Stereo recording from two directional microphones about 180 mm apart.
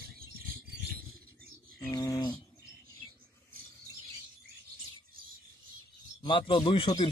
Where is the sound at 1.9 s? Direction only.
20° left (ahead or behind).